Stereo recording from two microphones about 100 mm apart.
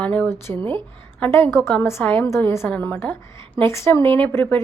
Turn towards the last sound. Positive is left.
turn(degrees=25)  # may be behind; listen again after turning